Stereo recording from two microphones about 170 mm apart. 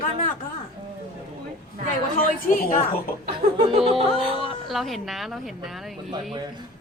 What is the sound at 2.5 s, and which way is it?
Speech, 50° left (ahead or behind).